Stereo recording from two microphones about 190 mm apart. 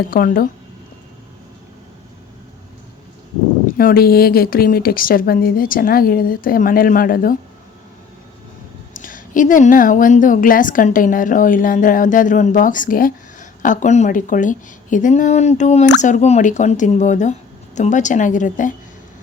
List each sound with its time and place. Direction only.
0.1 s a woman's voice: 50° left (ahead or behind)
3.8 s a woman's voice: 50° left (ahead or behind)
8.9 s a woman's voice: 45° left (ahead or behind)